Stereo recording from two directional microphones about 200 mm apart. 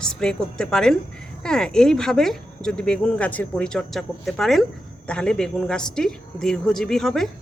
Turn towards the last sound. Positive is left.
turn(degrees=0)  # may be behind; listen again after turning